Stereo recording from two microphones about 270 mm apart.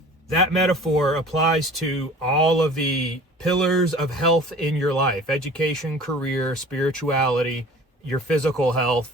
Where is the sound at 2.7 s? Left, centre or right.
Centre.